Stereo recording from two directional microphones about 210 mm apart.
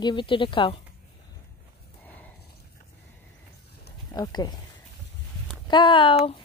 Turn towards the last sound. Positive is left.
turn(degrees=25)  # may be behind; listen again after turning